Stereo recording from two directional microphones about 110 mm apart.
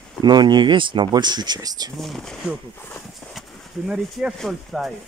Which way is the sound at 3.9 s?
5° right (ahead or behind).